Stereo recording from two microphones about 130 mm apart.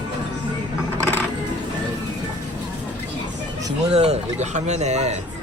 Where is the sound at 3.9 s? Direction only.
55° right (ahead or behind).